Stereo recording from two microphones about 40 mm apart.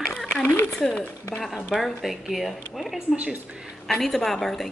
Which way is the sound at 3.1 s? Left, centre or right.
Right.